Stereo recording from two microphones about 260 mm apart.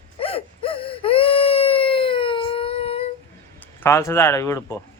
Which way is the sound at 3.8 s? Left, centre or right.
Centre.